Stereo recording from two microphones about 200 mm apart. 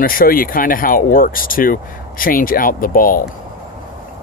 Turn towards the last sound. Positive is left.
turn(degrees=45)  # may be behind; listen again after turning